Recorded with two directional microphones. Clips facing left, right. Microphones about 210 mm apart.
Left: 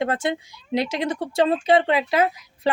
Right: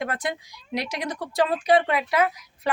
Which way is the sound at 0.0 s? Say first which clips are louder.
Left 5 dB; 25° left (ahead or behind).